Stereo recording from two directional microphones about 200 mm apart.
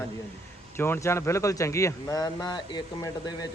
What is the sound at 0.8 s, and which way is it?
A man's voice, 15° left (ahead or behind).